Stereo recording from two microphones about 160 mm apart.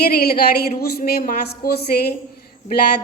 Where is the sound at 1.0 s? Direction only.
70° left (ahead or behind).